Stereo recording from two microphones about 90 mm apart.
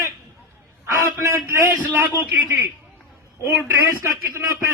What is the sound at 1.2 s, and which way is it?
Speech, 30° right (ahead or behind).